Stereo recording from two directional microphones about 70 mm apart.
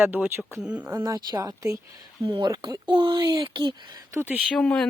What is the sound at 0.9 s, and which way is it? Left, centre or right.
Speech, right.